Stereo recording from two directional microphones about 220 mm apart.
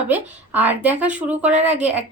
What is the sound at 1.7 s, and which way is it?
Speech, 30° right (ahead or behind).